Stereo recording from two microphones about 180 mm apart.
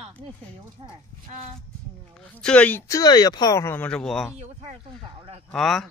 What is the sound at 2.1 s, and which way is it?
Speech, 5° left (ahead or behind).